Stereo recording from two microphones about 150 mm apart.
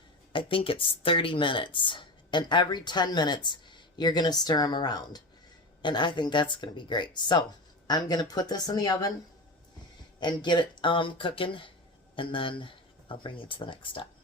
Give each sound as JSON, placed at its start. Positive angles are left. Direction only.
{"t": 0.3, "sound": "a woman's voice", "side_deg": 35}
{"t": 10.2, "sound": "speech", "side_deg": 30}